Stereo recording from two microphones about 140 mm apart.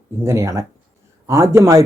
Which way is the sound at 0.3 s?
20° right (ahead or behind).